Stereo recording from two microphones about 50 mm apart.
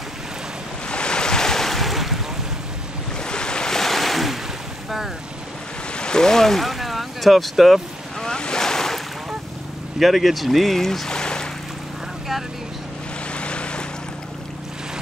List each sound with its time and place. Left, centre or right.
0.8 s waves: centre
3.2 s waves: centre
5.9 s boat: centre
8.2 s waves: centre
9.9 s speech: centre
13.3 s boat: left